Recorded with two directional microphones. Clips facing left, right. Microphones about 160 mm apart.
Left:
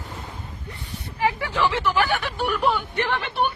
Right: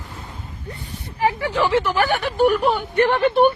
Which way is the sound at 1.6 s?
45° right (ahead or behind).